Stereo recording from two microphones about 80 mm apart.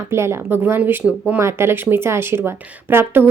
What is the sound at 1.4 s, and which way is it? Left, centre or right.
A woman's voice, right.